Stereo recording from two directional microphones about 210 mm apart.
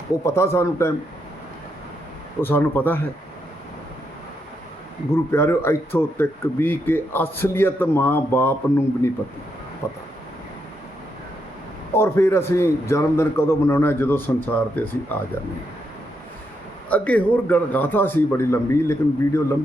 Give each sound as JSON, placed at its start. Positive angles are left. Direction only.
{"t": 0.3, "sound": "speech", "side_deg": 10}
{"t": 2.4, "sound": "speech", "side_deg": 10}
{"t": 5.1, "sound": "speech", "side_deg": 10}
{"t": 11.9, "sound": "speech", "side_deg": 10}
{"t": 16.9, "sound": "speech", "side_deg": 5}